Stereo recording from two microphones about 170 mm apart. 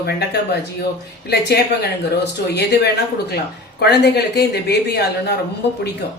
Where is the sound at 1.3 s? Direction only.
75° left (ahead or behind).